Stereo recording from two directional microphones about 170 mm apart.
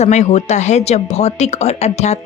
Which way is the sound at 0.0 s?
45° left (ahead or behind).